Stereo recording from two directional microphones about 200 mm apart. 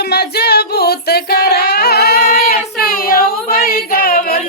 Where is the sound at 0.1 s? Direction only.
55° left (ahead or behind).